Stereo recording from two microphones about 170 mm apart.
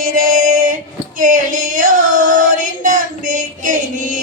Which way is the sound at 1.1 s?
50° right (ahead or behind).